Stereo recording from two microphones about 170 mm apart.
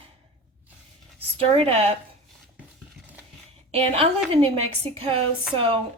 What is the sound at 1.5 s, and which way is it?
Speech, 40° right (ahead or behind).